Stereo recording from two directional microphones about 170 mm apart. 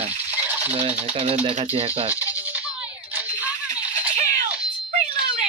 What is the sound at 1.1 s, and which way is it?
Speech, 35° right (ahead or behind).